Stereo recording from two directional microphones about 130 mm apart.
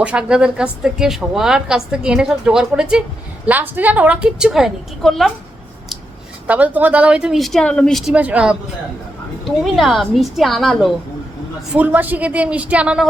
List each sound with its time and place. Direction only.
0.0 s a woman's voice: 10° right (ahead or behind)
6.5 s a woman's voice: 10° right (ahead or behind); by 8.1 s 5° left (ahead or behind)
8.1 s a woman's voice: 10° right (ahead or behind)
11.7 s a woman's voice: 15° right (ahead or behind)